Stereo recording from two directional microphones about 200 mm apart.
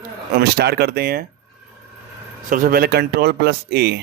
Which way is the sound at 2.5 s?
45° right (ahead or behind).